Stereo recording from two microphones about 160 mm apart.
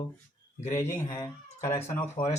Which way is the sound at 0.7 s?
15° left (ahead or behind).